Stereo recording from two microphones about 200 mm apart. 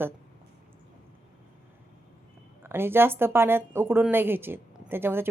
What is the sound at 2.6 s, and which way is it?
Speech, 10° right (ahead or behind).